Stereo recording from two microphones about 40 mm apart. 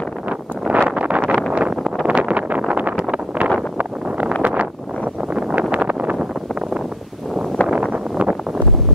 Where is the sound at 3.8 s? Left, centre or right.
Right.